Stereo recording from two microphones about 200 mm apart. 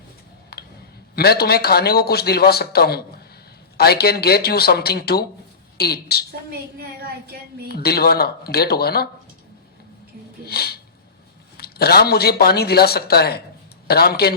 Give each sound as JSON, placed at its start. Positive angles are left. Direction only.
{"t": 0.5, "sound": "a sound", "side_deg": 50}
{"t": 1.1, "sound": "a man's voice", "side_deg": 50}
{"t": 7.7, "sound": "a man's voice", "side_deg": 50}
{"t": 10.4, "sound": "a man's voice", "side_deg": 50}